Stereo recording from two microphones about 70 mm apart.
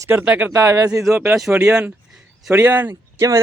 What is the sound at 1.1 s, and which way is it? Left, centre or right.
Speech, right.